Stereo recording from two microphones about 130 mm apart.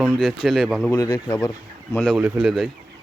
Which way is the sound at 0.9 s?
25° left (ahead or behind).